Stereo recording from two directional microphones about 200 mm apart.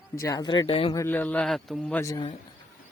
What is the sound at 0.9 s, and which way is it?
Speech, 10° left (ahead or behind).